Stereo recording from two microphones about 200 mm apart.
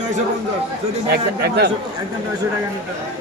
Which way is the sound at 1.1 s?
55° right (ahead or behind).